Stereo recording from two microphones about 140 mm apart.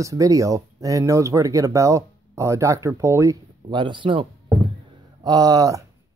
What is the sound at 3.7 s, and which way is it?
Speech, 35° right (ahead or behind).